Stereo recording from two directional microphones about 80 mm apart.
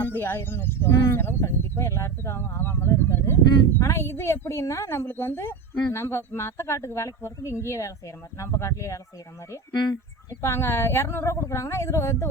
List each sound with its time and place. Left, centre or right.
0.0 s speech: left